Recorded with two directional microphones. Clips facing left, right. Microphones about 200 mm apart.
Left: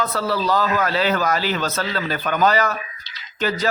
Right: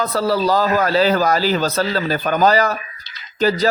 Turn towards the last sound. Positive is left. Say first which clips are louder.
# right 6 dB
turn(degrees=-35)  # may be behind; listen again after turning